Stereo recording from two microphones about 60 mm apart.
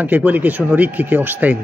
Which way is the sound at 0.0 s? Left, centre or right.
Right.